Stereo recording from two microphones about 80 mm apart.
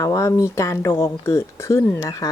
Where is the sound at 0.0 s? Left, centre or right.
Left.